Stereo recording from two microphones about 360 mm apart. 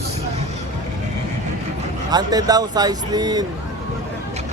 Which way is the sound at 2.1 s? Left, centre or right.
Centre.